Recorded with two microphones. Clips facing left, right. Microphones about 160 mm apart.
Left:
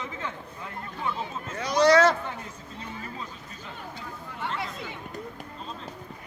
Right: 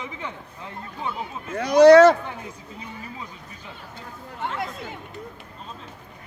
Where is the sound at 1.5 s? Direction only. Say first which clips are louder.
Right 9 dB; 60° right (ahead or behind).